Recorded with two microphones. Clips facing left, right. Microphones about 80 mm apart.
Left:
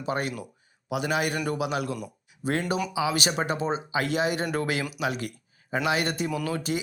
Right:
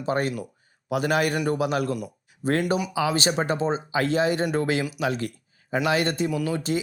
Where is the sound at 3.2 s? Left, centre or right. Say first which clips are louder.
Right 3 dB; right.